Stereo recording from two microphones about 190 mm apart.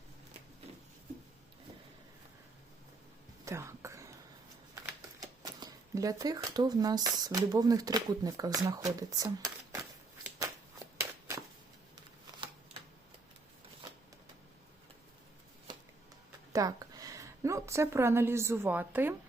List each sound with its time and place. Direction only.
3.4 s a sound: 15° right (ahead or behind)
4.7 s speech: 20° right (ahead or behind)
10.2 s shuffling cards: 15° right (ahead or behind)
16.5 s a woman's voice: 20° right (ahead or behind)